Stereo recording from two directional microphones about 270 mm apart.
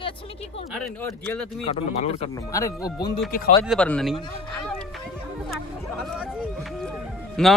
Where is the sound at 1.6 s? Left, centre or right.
Left; by 4.1 s centre.